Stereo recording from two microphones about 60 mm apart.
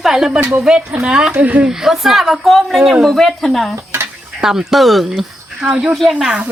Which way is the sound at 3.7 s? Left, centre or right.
Right.